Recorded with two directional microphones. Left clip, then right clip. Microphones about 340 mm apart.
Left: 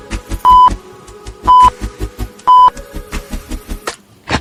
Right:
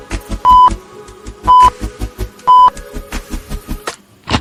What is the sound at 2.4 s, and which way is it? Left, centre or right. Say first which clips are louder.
Beep: even; centre.